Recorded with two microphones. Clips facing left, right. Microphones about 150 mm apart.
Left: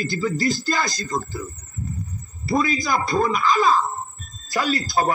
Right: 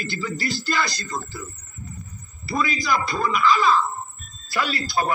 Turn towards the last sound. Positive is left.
turn(degrees=40)  # may be behind; listen again after turning